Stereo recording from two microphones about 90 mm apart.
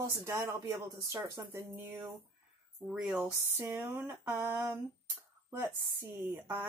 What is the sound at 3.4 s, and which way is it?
Speech, 25° right (ahead or behind).